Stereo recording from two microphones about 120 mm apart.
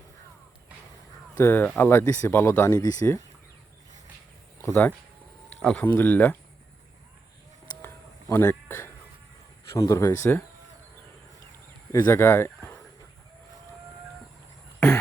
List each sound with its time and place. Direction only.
1.4 s speech: 20° left (ahead or behind)
4.6 s speech: 15° left (ahead or behind)
7.8 s a sound: 20° left (ahead or behind)
9.7 s speech: 30° left (ahead or behind)
11.9 s speech: 30° left (ahead or behind)